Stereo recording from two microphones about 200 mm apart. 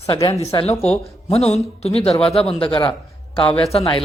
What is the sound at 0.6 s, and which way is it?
A woman's voice, 30° left (ahead or behind).